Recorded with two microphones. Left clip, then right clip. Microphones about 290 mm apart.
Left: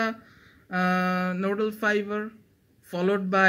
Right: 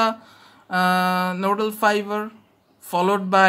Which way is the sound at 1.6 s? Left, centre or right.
Centre.